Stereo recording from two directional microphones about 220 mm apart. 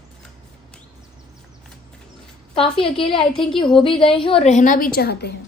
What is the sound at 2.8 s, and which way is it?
A woman's voice, 25° left (ahead or behind).